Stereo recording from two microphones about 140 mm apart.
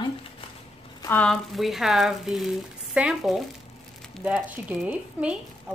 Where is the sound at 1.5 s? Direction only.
Centre (ahead or behind).